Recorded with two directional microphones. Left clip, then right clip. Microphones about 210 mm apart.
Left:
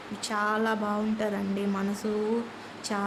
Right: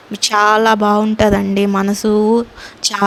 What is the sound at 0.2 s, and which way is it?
A woman's voice, 45° right (ahead or behind).